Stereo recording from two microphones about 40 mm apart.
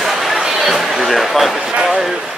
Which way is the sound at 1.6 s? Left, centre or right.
Right.